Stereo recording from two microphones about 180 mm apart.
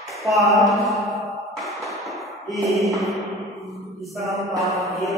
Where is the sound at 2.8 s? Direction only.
Centre (ahead or behind).